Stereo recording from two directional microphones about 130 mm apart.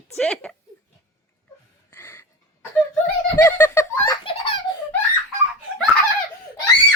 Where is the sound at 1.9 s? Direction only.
15° left (ahead or behind).